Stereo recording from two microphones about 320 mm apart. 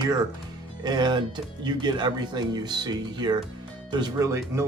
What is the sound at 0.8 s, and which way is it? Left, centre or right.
Speech, centre.